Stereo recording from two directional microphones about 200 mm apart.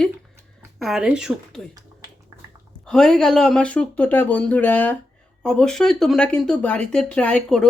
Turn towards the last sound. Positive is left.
turn(degrees=5)  # may be behind; listen again after turning